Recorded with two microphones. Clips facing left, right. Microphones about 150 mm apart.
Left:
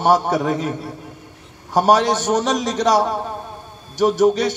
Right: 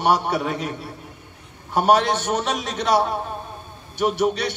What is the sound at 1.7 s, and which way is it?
A man's voice, 40° left (ahead or behind).